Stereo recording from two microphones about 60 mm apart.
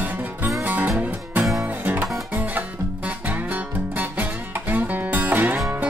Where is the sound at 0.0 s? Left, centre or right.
Right.